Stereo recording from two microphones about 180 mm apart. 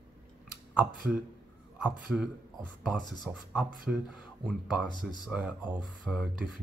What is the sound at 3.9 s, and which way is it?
Speech, 5° right (ahead or behind).